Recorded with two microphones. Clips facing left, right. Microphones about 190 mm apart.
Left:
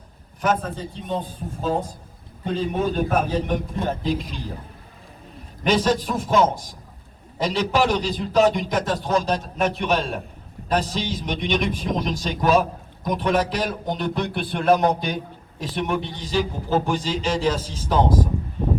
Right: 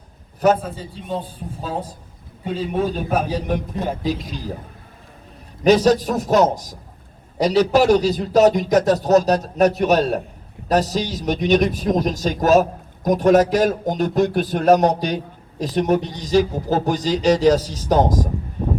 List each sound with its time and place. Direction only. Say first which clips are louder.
0.6 s a man's voice: even; 5° right (ahead or behind)
2.4 s a man's voice: right 1 dB; 5° right (ahead or behind)
5.6 s a man's voice: right 6 dB; 40° right (ahead or behind)
18.6 s a sound: right 1 dB; 45° right (ahead or behind)